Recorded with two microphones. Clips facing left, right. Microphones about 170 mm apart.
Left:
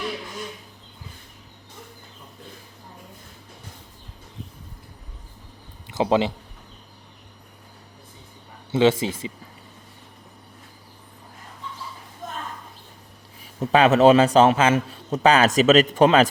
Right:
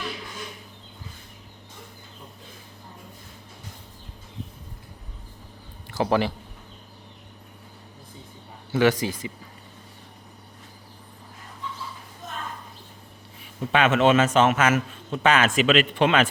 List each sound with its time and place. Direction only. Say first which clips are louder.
5.9 s speech: left 2 dB; 20° left (ahead or behind)
8.7 s speech: left 2 dB; 25° left (ahead or behind)
13.4 s a man's voice: left 4 dB; 40° left (ahead or behind)